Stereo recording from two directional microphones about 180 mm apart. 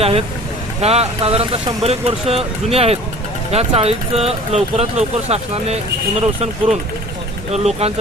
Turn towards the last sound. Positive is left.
turn(degrees=-35)  # may be behind; listen again after turning